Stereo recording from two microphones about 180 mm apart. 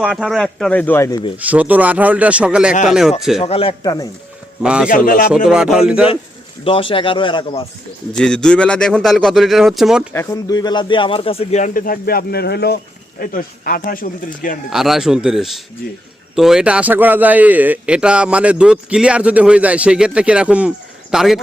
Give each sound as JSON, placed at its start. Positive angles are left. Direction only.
{"t": 0.1, "sound": "a man's voice", "side_deg": 0}
{"t": 1.4, "sound": "a man's voice", "side_deg": -10}
{"t": 3.4, "sound": "a man's voice", "side_deg": 30}
{"t": 4.6, "sound": "a man's voice", "side_deg": -5}
{"t": 4.9, "sound": "speech", "side_deg": 50}
{"t": 5.5, "sound": "a man's voice", "side_deg": -5}
{"t": 6.7, "sound": "speech", "side_deg": 30}
{"t": 8.1, "sound": "a man's voice", "side_deg": 5}
{"t": 10.1, "sound": "speech", "side_deg": 15}
{"t": 14.7, "sound": "a man's voice", "side_deg": 0}